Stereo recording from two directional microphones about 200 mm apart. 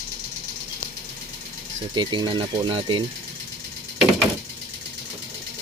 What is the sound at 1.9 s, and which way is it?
Speech, 20° right (ahead or behind).